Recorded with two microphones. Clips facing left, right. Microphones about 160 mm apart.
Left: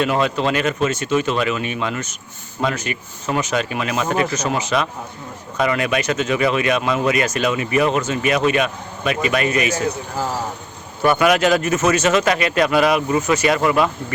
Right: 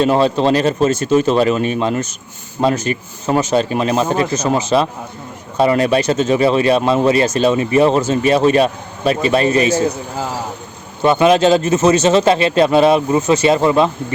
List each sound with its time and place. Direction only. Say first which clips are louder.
0.0 s speech: right 5 dB; 35° right (ahead or behind)
11.0 s a man's voice: right 4 dB; 25° right (ahead or behind)